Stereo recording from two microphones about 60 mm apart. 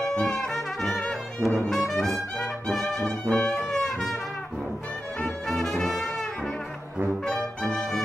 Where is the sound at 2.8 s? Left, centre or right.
Centre.